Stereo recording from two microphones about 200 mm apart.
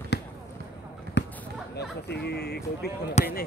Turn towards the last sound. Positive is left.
turn(degrees=35)  # may be behind; listen again after turning